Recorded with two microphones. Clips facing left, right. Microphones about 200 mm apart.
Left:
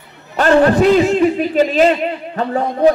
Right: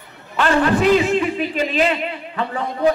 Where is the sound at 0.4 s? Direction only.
40° left (ahead or behind).